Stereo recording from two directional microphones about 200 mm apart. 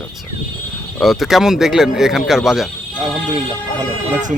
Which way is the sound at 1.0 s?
Centre (ahead or behind).